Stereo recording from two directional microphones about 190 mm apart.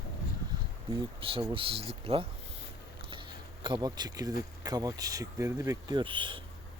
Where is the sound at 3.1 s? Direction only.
25° right (ahead or behind).